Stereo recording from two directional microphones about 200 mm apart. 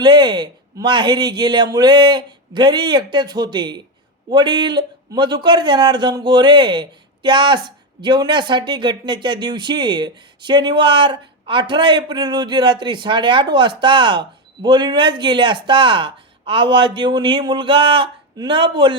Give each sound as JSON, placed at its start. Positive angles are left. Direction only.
{"t": 0.0, "sound": "a man's voice", "side_deg": -20}